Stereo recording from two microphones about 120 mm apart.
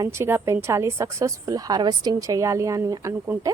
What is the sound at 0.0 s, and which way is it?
A woman's voice, 20° right (ahead or behind).